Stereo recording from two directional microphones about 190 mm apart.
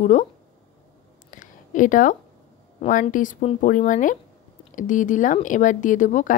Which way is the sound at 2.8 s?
45° left (ahead or behind).